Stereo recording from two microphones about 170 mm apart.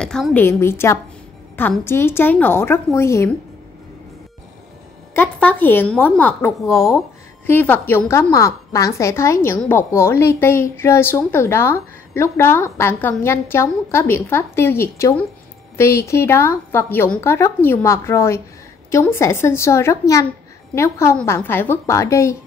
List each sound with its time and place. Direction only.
0.0 s a woman's voice: 5° left (ahead or behind)
5.1 s a woman's voice: 10° left (ahead or behind)